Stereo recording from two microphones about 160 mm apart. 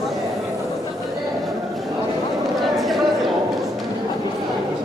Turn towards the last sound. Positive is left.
turn(degrees=0)  # may be behind; listen again after turning